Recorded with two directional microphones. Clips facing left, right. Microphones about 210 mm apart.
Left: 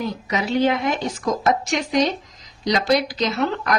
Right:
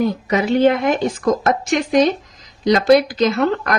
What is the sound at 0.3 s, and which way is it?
Speech, 55° right (ahead or behind).